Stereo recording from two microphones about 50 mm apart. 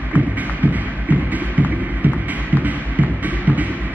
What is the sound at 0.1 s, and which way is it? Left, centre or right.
Music, right.